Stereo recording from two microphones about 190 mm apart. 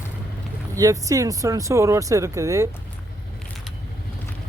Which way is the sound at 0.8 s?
15° right (ahead or behind).